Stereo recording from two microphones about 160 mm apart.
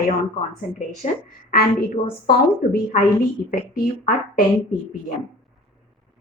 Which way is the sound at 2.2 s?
65° left (ahead or behind).